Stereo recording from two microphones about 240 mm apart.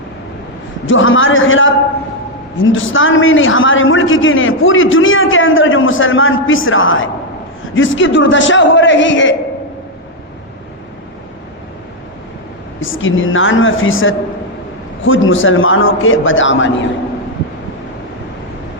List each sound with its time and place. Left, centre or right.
0.9 s a man's voice: left
12.8 s a man's voice: left